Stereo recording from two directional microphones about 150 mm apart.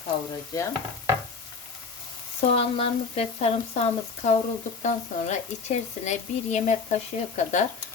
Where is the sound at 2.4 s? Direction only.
40° left (ahead or behind).